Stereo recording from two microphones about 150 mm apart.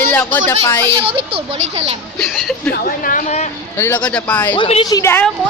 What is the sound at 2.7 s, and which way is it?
Speech, 70° left (ahead or behind).